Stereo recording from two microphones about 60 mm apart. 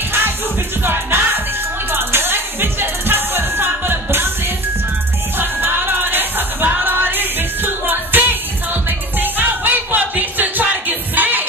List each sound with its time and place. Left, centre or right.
0.8 s music: right
5.4 s music: right